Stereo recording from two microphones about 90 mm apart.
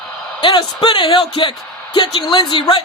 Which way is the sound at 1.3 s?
70° left (ahead or behind).